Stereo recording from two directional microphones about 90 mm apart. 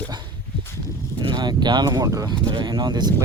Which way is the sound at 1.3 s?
55° right (ahead or behind).